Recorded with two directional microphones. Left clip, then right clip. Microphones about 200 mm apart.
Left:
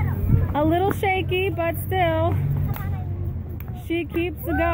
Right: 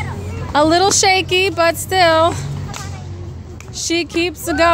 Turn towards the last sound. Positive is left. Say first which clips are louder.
# right 9 dB
turn(degrees=-25)  # may be behind; listen again after turning